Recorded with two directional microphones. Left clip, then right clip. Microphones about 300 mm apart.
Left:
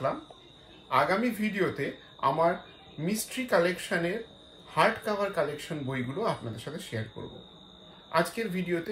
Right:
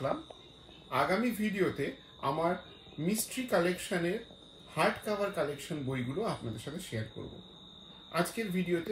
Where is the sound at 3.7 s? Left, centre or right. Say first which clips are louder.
Left 3 dB; centre.